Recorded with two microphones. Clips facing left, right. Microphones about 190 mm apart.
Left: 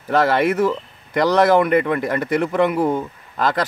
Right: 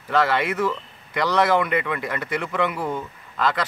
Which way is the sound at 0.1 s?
40° left (ahead or behind).